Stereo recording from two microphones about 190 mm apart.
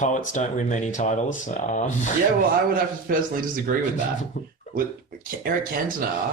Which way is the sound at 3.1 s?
50° right (ahead or behind).